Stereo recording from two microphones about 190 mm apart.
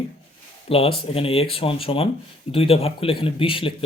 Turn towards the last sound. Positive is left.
turn(degrees=30)  # may be behind; listen again after turning